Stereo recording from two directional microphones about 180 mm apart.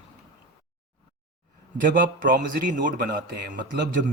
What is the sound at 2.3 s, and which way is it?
Speech, 45° right (ahead or behind).